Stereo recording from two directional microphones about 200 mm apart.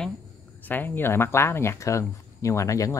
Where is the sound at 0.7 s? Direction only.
10° left (ahead or behind).